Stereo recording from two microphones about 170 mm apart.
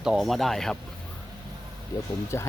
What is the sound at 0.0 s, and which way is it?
Speech, centre (ahead or behind).